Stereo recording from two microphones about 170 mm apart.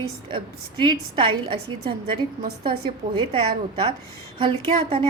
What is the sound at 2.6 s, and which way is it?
A woman's voice, 30° right (ahead or behind).